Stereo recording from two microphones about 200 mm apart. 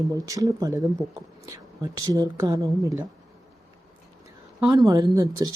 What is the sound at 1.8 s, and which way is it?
Speech, 20° right (ahead or behind).